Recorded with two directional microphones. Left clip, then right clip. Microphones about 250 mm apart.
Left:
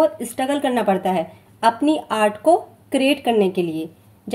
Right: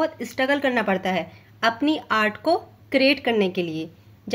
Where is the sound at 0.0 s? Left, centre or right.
Centre.